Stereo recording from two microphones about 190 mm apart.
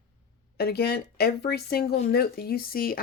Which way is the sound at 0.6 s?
55° left (ahead or behind).